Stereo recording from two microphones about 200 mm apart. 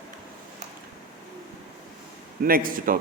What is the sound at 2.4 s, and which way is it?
Speech, 45° right (ahead or behind).